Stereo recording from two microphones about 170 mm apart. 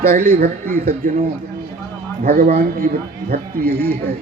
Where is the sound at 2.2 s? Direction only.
60° right (ahead or behind).